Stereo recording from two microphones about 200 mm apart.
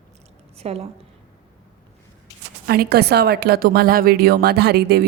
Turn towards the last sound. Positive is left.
turn(degrees=-55)  # may be behind; listen again after turning